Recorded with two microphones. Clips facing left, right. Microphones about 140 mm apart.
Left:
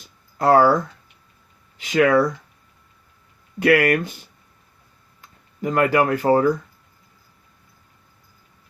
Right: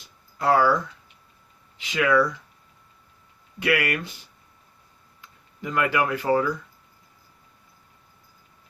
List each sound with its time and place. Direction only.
0.3 s speech: 45° left (ahead or behind)
1.8 s speech: 45° left (ahead or behind)
3.6 s speech: 45° left (ahead or behind)
5.2 s speech: 45° left (ahead or behind)